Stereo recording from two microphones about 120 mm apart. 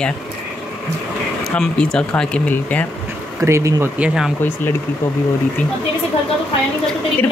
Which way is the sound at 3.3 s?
25° right (ahead or behind).